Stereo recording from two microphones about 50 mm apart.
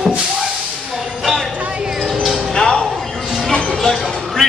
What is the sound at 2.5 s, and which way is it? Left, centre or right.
Music, centre.